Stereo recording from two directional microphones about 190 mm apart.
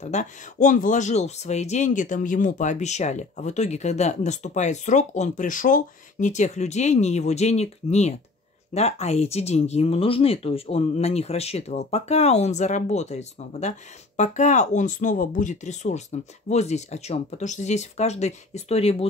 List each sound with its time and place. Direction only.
0.0 s speech: 40° left (ahead or behind)